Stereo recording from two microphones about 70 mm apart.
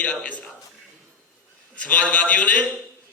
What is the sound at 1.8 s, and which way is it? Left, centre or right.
Speech, centre.